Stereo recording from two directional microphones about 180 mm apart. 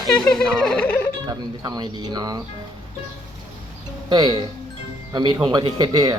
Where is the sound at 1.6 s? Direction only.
20° right (ahead or behind).